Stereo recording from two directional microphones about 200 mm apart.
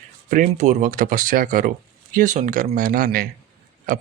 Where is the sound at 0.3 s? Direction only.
40° right (ahead or behind).